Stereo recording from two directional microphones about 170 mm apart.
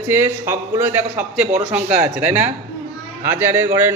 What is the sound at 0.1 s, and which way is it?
A man's voice, 15° right (ahead or behind).